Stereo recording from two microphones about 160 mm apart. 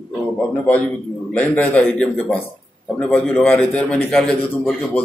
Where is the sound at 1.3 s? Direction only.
10° left (ahead or behind).